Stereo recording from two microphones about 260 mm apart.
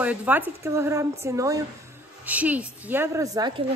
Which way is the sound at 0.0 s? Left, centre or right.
Centre.